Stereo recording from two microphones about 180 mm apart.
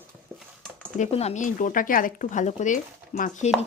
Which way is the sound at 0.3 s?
Centre (ahead or behind).